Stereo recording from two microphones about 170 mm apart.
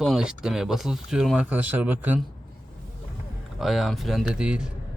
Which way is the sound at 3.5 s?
Centre (ahead or behind).